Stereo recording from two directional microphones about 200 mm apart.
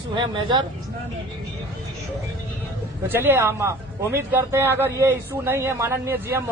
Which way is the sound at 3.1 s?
10° right (ahead or behind).